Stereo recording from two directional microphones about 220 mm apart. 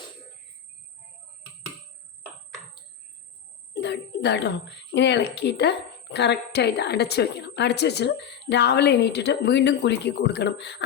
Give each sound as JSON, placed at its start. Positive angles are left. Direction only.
{"t": 3.8, "sound": "speech", "side_deg": 50}